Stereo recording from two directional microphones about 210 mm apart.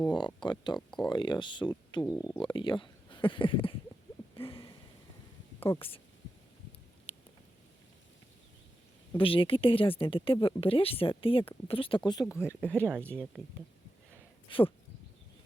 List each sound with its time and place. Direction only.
0.1 s speech: 20° left (ahead or behind)
0.9 s speech: 5° left (ahead or behind)
1.1 s speech: 20° left (ahead or behind)
4.4 s a sound: 25° left (ahead or behind)
5.7 s speech: 25° left (ahead or behind)
9.1 s speech: 25° left (ahead or behind)
12.7 s speech: 10° right (ahead or behind)
14.5 s speech: 25° left (ahead or behind)